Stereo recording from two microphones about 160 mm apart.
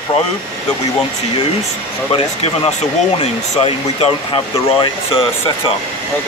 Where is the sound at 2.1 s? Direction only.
35° left (ahead or behind).